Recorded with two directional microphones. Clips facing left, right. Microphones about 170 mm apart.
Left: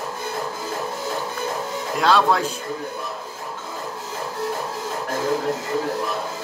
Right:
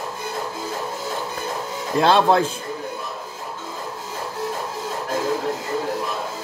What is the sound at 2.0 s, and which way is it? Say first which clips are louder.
Speech: right 2 dB; 25° right (ahead or behind).